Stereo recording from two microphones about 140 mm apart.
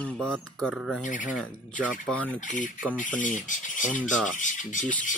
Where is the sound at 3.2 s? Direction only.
70° left (ahead or behind).